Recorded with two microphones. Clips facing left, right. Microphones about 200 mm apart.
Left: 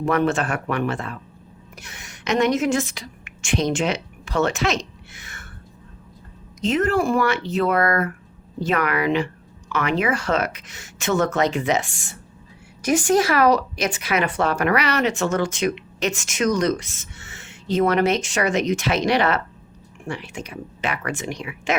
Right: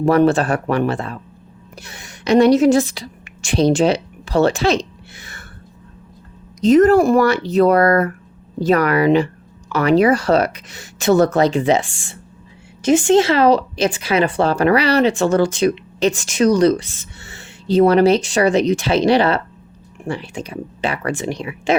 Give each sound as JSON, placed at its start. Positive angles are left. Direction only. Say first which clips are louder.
{"t": 0.0, "sound": "a woman's voice", "louder": "right 7 dB", "side_deg": -35}
{"t": 6.6, "sound": "a woman's voice", "louder": "right 9 dB", "side_deg": -40}